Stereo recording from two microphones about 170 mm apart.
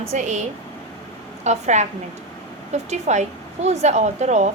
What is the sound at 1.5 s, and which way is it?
A woman's voice, 45° right (ahead or behind).